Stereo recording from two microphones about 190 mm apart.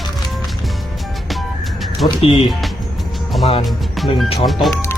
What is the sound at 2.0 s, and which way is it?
Speech, 30° left (ahead or behind).